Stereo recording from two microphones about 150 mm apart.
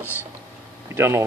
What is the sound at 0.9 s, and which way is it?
Speech, 15° right (ahead or behind).